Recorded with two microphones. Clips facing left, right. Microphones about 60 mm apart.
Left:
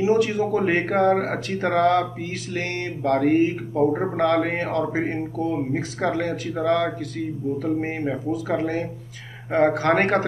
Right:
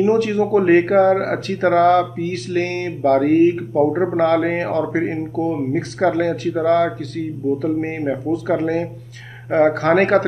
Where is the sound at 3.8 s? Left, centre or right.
Centre.